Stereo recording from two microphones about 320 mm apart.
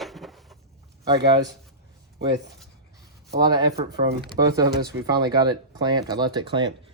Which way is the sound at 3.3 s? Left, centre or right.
Centre.